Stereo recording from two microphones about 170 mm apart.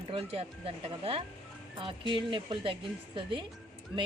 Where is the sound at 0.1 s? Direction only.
35° right (ahead or behind).